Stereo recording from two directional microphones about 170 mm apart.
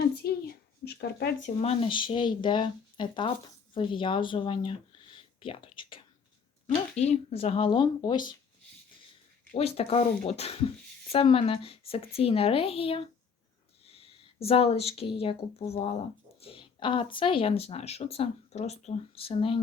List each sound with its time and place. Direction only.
0.2 s a sound: 65° left (ahead or behind)
1.4 s speech: 35° left (ahead or behind)
9.6 s a woman's voice: 35° left (ahead or behind)